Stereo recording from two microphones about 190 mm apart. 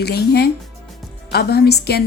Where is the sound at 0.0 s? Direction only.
55° left (ahead or behind).